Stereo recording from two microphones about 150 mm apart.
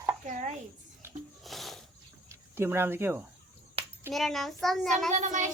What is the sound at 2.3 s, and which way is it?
Speech, 15° right (ahead or behind).